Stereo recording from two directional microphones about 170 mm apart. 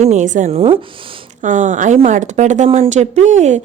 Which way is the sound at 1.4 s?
45° right (ahead or behind).